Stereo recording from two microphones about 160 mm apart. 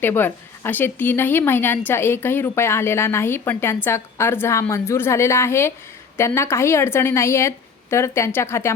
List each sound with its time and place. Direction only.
0.0 s a woman's voice: 15° left (ahead or behind)